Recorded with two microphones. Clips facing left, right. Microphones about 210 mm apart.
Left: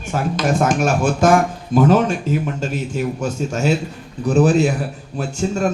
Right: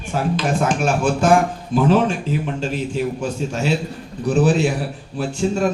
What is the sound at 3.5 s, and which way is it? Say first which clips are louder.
A man's voice: left 2 dB; 45° left (ahead or behind).